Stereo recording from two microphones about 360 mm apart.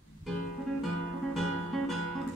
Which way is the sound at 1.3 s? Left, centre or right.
Centre.